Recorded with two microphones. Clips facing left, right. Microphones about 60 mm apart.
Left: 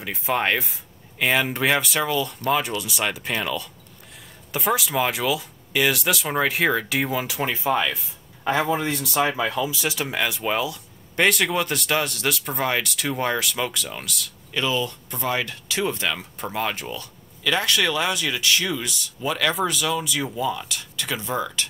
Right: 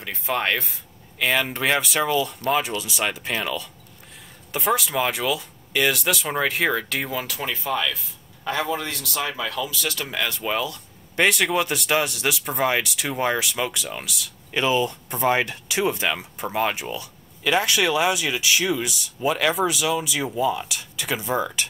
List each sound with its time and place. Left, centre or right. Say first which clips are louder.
0.0 s speech: left 1 dB; centre
14.5 s speech: right 3 dB; right